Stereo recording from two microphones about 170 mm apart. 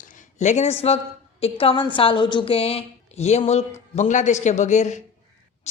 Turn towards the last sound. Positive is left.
turn(degrees=45)  # may be behind; listen again after turning